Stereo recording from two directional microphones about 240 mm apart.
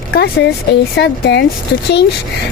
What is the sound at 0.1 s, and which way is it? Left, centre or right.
Speech, left.